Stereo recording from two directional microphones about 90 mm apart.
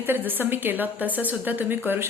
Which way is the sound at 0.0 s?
25° right (ahead or behind).